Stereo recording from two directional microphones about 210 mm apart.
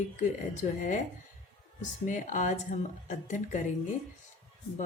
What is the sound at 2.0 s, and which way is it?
Speech, 35° left (ahead or behind).